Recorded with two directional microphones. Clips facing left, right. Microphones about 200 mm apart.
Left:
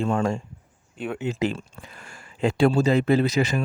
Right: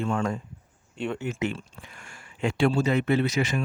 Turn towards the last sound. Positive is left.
turn(degrees=35)  # may be behind; listen again after turning